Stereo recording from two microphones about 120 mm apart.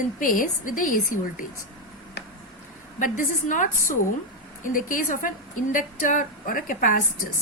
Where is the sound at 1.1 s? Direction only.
90° left.